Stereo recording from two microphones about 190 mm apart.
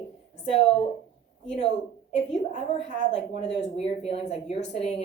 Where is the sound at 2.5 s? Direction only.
35° left (ahead or behind).